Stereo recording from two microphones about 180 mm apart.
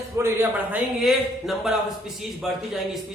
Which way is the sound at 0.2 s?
15° right (ahead or behind).